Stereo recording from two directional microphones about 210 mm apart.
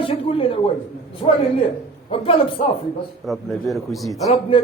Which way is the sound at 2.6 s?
30° left (ahead or behind).